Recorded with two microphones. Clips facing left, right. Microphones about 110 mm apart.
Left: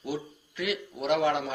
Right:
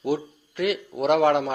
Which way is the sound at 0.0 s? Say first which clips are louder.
Right 8 dB; 55° right (ahead or behind).